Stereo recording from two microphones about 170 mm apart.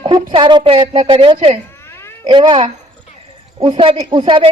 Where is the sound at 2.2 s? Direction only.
30° right (ahead or behind).